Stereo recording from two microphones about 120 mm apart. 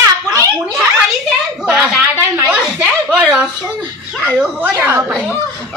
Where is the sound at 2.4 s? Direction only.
10° right (ahead or behind).